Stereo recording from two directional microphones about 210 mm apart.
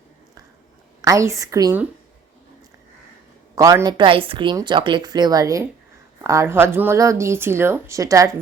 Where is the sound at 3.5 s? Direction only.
15° right (ahead or behind).